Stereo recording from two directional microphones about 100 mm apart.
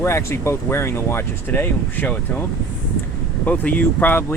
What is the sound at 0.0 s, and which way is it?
Speech, 25° left (ahead or behind).